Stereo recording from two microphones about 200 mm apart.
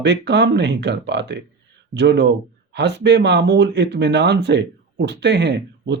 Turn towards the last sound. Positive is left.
turn(degrees=-60)  # may be behind; listen again after turning